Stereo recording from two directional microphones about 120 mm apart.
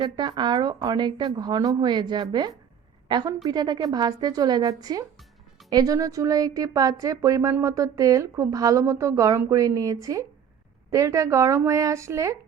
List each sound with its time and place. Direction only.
0.0 s speech: 40° right (ahead or behind)